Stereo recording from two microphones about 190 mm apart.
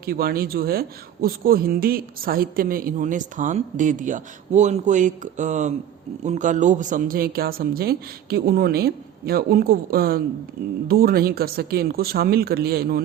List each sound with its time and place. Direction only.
0.0 s speech: 50° right (ahead or behind)